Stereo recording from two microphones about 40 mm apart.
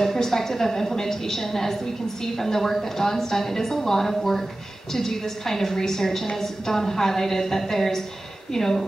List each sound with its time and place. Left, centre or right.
0.0 s a woman's voice: centre